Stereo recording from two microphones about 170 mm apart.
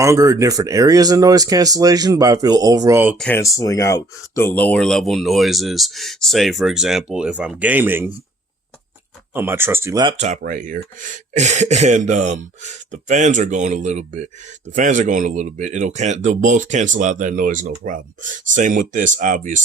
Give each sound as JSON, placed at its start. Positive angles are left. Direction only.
{"t": 0.0, "sound": "speech", "side_deg": -20}
{"t": 3.2, "sound": "speech", "side_deg": 10}
{"t": 3.4, "sound": "speech", "side_deg": 20}
{"t": 9.3, "sound": "speech", "side_deg": -15}
{"t": 10.2, "sound": "speech", "side_deg": -45}